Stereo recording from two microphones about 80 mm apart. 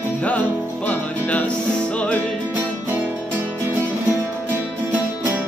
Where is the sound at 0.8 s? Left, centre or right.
Centre.